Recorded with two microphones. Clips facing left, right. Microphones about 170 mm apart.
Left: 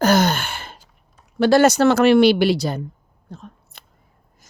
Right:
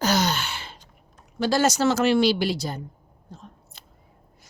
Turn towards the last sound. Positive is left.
turn(degrees=60)  # may be behind; listen again after turning